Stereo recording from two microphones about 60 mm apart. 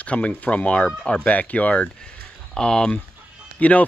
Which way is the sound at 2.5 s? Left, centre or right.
Centre.